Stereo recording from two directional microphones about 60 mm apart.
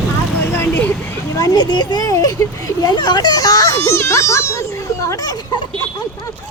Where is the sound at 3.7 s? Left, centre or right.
Left.